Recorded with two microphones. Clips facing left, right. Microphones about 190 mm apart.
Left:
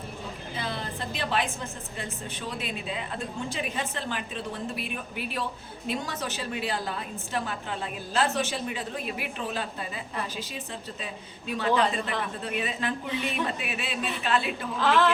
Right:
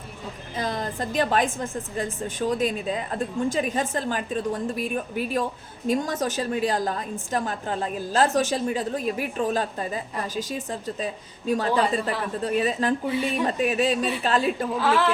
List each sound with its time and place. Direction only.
0.5 s a woman's voice: 40° right (ahead or behind)
14.8 s a woman's voice: 10° right (ahead or behind)